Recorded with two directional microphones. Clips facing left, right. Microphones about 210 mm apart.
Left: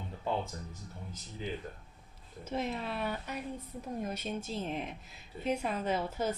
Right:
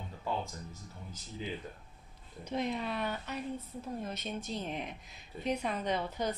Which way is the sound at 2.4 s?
5° left (ahead or behind).